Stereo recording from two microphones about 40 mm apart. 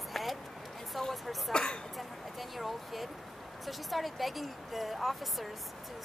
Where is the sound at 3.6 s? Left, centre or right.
Centre.